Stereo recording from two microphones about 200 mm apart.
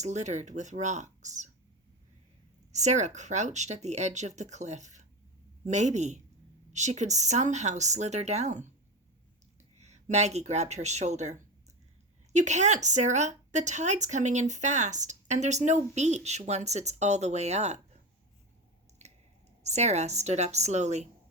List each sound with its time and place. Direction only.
0.0 s speech: 35° right (ahead or behind)
2.7 s speech: 35° right (ahead or behind)
19.0 s squish: 35° right (ahead or behind)
19.6 s speech: 35° right (ahead or behind)